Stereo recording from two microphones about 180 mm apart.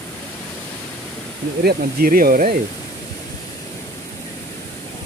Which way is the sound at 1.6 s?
55° right (ahead or behind).